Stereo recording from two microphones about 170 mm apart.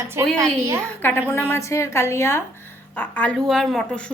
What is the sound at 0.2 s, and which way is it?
Speech, 15° right (ahead or behind).